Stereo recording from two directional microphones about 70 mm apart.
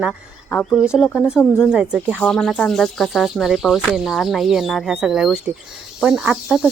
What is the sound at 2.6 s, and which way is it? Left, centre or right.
Speech, centre.